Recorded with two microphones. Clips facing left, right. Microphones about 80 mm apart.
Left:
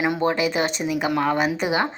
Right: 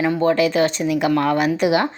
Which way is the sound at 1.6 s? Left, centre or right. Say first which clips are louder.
Right 5 dB; centre.